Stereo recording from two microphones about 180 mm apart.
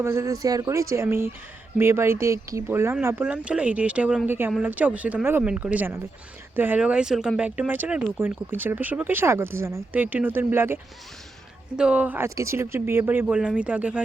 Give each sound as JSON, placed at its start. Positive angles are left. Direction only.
{"t": 0.0, "sound": "speech", "side_deg": -15}
{"t": 11.8, "sound": "speech", "side_deg": -5}